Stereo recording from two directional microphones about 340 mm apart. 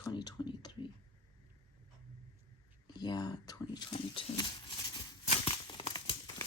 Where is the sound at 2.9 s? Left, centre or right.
Centre.